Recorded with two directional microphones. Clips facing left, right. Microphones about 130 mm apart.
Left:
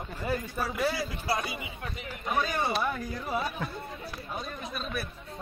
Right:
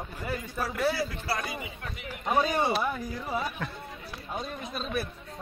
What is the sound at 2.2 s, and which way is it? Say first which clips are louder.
Speech: right 4 dB; 30° right (ahead or behind).